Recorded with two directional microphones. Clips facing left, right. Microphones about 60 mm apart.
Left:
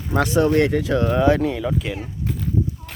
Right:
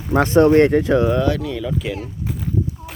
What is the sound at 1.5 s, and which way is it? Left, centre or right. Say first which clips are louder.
Speech: even; centre.